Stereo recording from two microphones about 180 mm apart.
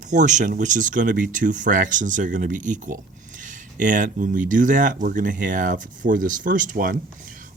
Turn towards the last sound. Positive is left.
turn(degrees=-50)  # may be behind; listen again after turning